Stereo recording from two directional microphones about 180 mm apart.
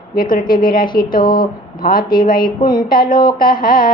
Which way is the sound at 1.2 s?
25° left (ahead or behind).